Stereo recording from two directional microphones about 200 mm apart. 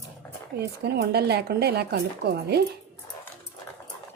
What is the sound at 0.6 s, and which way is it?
A woman's voice, 55° right (ahead or behind).